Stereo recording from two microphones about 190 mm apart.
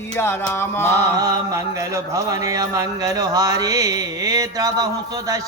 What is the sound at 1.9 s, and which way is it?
Mantra, 15° right (ahead or behind).